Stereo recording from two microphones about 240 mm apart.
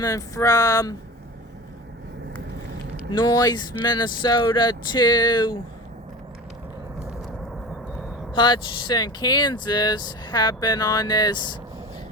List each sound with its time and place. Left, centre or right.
0.0 s speech: centre
3.1 s speech: centre
8.3 s speech: centre